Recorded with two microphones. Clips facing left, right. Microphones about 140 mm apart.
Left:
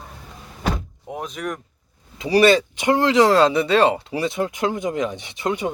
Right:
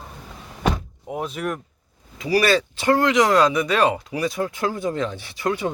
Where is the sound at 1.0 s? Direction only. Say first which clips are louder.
Right 2 dB; centre (ahead or behind).